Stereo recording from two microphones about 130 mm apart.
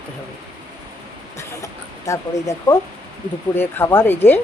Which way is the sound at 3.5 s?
15° left (ahead or behind).